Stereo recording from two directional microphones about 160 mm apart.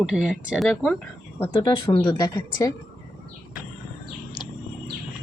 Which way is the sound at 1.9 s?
35° left (ahead or behind).